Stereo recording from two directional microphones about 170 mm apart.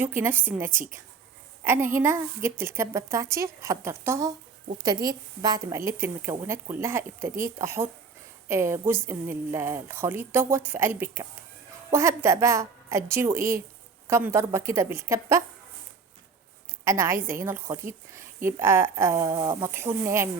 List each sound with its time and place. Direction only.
0.0 s a woman's voice: 10° right (ahead or behind)
16.8 s a woman's voice: 15° right (ahead or behind)